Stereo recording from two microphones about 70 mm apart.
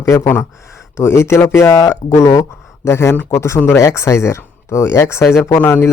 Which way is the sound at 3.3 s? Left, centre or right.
Left.